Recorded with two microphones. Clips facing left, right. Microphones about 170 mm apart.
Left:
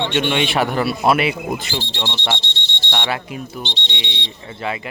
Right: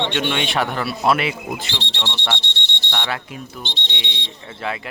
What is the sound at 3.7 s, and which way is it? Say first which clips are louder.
Speech: left 2 dB; 50° right (ahead or behind).